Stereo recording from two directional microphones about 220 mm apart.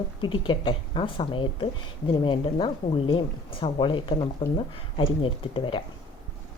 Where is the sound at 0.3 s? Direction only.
20° left (ahead or behind).